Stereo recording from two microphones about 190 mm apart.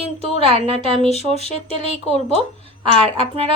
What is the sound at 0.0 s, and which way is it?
A woman's voice, 30° right (ahead or behind).